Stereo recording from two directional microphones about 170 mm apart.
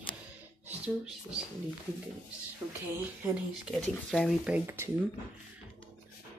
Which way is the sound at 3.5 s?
Centre (ahead or behind).